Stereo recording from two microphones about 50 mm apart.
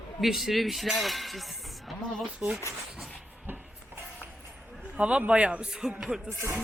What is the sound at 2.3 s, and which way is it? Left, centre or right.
Speech, right.